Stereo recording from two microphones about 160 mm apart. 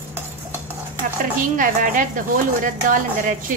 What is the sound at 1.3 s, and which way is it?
Speech, 55° right (ahead or behind).